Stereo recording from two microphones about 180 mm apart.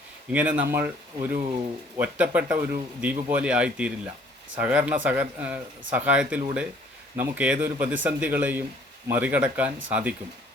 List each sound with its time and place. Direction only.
0.3 s speech: 10° right (ahead or behind)